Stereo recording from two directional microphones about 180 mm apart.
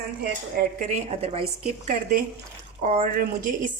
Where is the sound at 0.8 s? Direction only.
35° right (ahead or behind).